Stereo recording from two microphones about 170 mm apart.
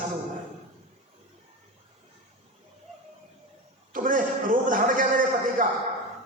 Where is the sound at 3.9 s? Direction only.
50° right (ahead or behind).